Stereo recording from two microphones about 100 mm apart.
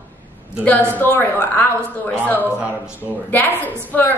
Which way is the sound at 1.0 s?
20° left (ahead or behind).